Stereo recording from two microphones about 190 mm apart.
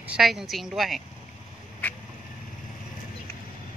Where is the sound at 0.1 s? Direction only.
Centre (ahead or behind).